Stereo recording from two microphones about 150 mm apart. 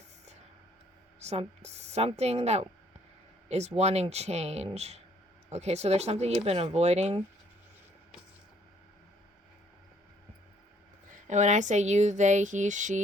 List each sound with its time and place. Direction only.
1.2 s speech: 45° right (ahead or behind)
11.1 s speech: 50° right (ahead or behind)